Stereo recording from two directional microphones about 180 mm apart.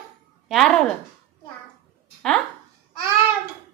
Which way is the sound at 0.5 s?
Centre (ahead or behind).